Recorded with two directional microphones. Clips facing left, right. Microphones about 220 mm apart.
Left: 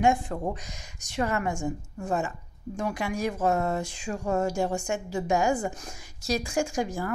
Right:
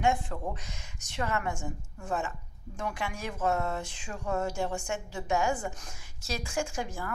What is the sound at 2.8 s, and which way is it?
Speech, 40° left (ahead or behind).